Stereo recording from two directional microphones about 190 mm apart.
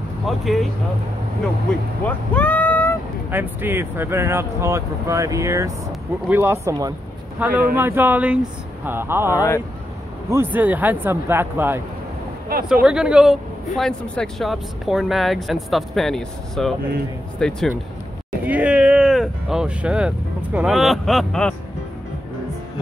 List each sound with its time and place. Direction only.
1.4 s speech: 5° left (ahead or behind)
3.3 s speech: 10° right (ahead or behind)
9.3 s speech: 15° left (ahead or behind)
10.3 s speech: 10° right (ahead or behind)
18.4 s speech: 10° right (ahead or behind)